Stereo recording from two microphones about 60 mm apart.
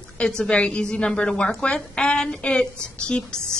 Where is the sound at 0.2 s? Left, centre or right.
Centre.